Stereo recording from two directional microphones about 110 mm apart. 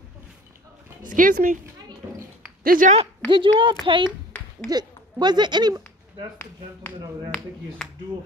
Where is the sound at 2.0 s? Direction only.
30° right (ahead or behind).